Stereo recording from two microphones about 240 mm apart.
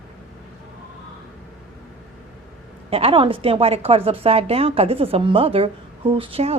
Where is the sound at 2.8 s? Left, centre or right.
Right.